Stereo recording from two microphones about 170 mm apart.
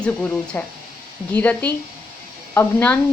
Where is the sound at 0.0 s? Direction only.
5° left (ahead or behind).